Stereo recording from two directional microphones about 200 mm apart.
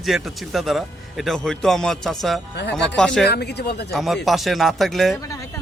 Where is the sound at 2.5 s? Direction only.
60° left (ahead or behind).